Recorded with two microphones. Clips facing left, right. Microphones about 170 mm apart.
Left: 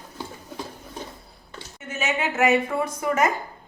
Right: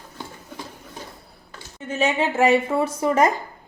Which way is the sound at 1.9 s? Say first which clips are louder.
Right 5 dB; 30° right (ahead or behind).